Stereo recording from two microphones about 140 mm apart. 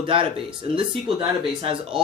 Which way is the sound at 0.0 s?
35° right (ahead or behind).